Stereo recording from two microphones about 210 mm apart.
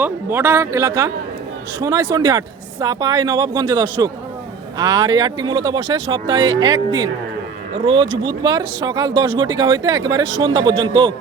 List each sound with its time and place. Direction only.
0.0 s a man's voice: 10° right (ahead or behind)
8.2 s speech: 20° right (ahead or behind)